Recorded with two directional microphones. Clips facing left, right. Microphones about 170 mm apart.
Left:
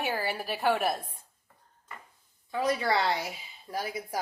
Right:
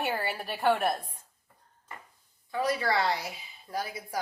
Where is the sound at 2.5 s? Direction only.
20° left (ahead or behind).